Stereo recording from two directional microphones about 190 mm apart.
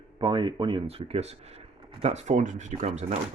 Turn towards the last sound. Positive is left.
turn(degrees=-35)  # may be behind; listen again after turning